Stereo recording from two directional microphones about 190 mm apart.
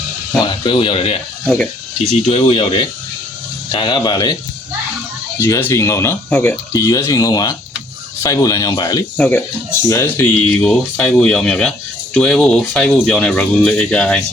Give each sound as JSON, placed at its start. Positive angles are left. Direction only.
{"t": 0.6, "sound": "speech", "side_deg": 25}
{"t": 2.2, "sound": "speech", "side_deg": 30}
{"t": 5.4, "sound": "speech", "side_deg": 10}
{"t": 9.1, "sound": "speech", "side_deg": 5}